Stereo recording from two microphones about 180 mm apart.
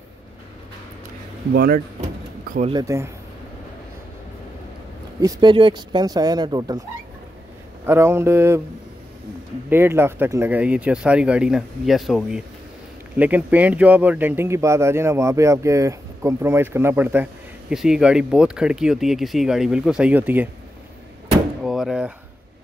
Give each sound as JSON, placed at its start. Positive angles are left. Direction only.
{"t": 1.5, "sound": "speech", "side_deg": -60}
{"t": 2.7, "sound": "speech", "side_deg": -15}
{"t": 5.2, "sound": "speech", "side_deg": -25}
{"t": 7.8, "sound": "speech", "side_deg": -15}
{"t": 9.7, "sound": "speech", "side_deg": -10}
{"t": 21.6, "sound": "a sound", "side_deg": 0}